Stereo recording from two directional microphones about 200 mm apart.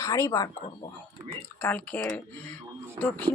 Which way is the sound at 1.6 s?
10° left (ahead or behind).